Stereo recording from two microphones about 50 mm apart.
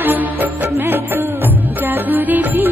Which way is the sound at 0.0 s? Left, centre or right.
Right.